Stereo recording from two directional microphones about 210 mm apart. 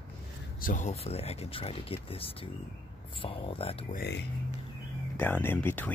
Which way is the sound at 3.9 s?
55° left (ahead or behind).